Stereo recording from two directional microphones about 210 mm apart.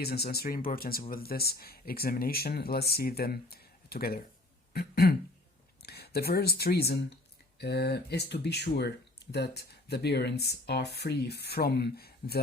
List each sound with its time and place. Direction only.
0.0 s speech: 50° left (ahead or behind)
4.7 s a sound: 45° left (ahead or behind)
5.8 s speech: 50° left (ahead or behind)